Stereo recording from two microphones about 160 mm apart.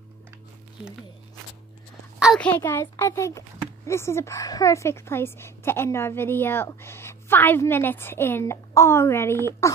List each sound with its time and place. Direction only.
2.3 s a child's voice: 10° left (ahead or behind)